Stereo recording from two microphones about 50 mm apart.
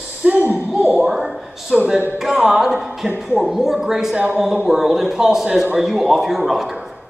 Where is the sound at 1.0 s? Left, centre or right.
Centre.